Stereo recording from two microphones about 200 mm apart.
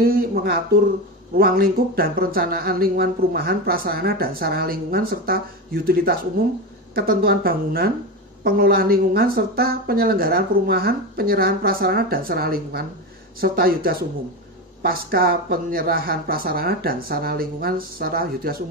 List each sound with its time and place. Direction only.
0.0 s speech: 45° right (ahead or behind)